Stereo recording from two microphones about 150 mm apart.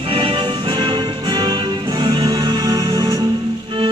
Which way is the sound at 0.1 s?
35° right (ahead or behind).